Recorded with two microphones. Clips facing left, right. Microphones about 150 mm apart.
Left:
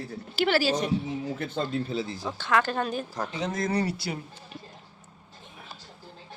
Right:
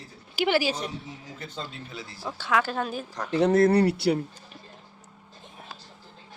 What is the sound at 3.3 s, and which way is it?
Speech, 65° right (ahead or behind).